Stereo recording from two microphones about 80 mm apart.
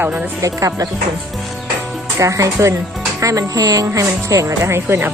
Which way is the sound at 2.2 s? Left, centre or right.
Right.